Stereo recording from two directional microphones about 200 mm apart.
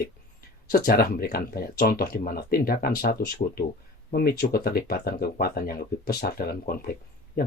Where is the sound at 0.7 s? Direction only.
50° left (ahead or behind).